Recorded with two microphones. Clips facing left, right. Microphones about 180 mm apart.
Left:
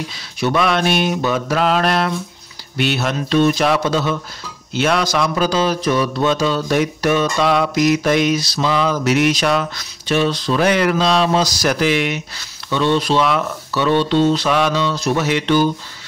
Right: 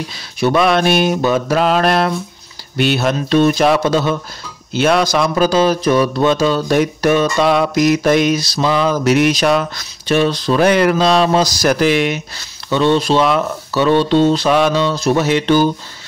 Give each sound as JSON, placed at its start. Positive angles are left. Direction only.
{"t": 0.4, "sound": "a man's voice", "side_deg": -40}
{"t": 12.6, "sound": "speech", "side_deg": -30}